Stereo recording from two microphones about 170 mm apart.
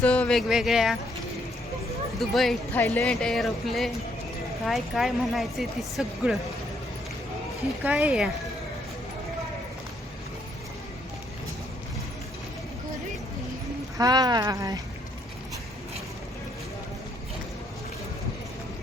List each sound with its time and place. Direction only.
0.0 s speech: 5° left (ahead or behind)
2.1 s speech: centre (ahead or behind)
7.9 s speech: 5° right (ahead or behind)
14.0 s speech: 25° right (ahead or behind)